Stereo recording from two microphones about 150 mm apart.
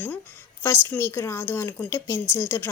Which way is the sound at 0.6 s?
15° left (ahead or behind).